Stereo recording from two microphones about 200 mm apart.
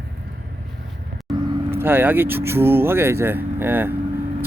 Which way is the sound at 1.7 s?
10° right (ahead or behind).